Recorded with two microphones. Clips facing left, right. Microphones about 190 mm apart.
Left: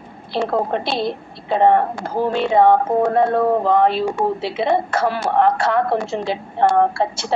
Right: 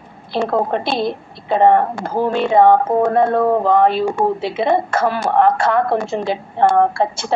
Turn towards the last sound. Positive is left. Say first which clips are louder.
# right 2 dB
turn(degrees=-50)  # may be behind; listen again after turning